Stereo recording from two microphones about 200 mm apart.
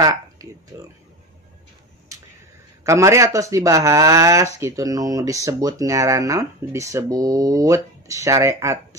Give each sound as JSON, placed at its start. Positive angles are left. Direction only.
{"t": 0.0, "sound": "speech", "side_deg": -15}
{"t": 2.8, "sound": "speech", "side_deg": -15}